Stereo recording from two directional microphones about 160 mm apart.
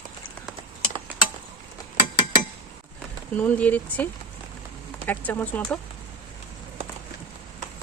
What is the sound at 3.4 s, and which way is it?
Speech, 10° left (ahead or behind).